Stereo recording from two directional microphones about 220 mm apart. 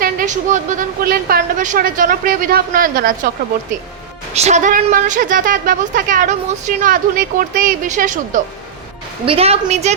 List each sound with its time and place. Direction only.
0.0 s a woman's voice: 35° right (ahead or behind)
4.4 s a woman's voice: 30° right (ahead or behind)